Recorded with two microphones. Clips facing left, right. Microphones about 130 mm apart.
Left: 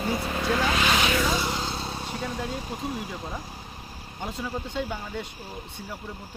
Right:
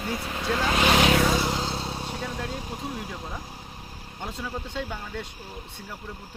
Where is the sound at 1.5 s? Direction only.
25° right (ahead or behind).